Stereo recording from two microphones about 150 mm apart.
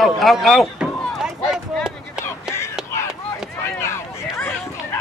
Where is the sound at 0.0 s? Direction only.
Centre (ahead or behind).